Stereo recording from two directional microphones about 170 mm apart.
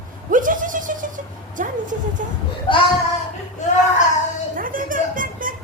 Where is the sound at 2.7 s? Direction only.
30° left (ahead or behind).